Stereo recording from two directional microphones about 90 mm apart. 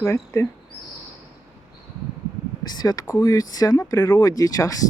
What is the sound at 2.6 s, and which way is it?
Speech, 45° left (ahead or behind).